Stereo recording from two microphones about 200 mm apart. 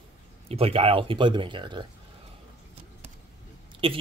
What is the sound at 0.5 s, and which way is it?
Speech, 30° right (ahead or behind).